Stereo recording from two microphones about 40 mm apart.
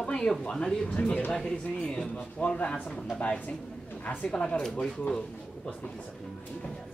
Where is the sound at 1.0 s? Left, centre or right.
Left.